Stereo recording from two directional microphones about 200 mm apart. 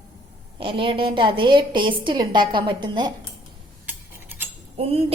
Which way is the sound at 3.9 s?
10° right (ahead or behind).